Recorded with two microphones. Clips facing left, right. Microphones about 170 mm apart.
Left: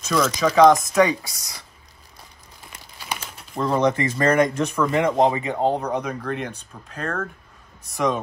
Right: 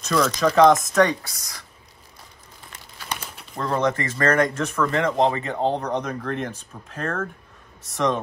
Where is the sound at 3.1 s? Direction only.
Centre (ahead or behind).